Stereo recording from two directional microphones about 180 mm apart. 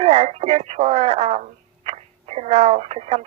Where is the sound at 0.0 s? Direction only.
35° right (ahead or behind).